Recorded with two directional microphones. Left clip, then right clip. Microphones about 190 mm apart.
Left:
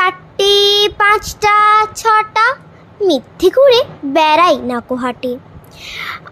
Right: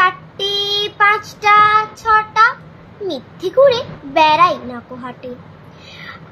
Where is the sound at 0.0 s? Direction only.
60° left (ahead or behind).